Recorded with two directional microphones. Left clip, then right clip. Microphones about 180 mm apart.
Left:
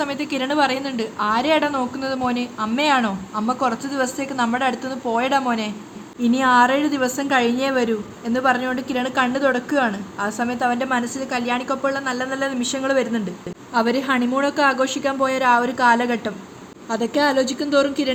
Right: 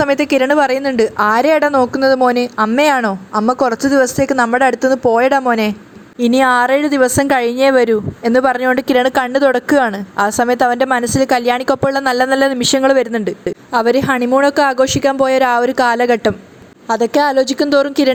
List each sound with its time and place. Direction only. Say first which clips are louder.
0.0 s a woman's voice: right 11 dB; 40° right (ahead or behind)